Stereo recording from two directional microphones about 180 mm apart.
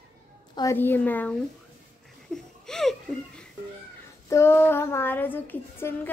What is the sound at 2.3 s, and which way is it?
Laughter, centre (ahead or behind).